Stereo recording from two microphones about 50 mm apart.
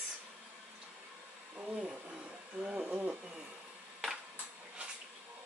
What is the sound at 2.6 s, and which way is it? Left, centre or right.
Speech, right.